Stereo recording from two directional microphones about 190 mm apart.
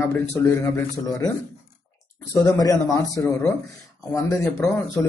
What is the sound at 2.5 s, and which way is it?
Speech, 15° left (ahead or behind).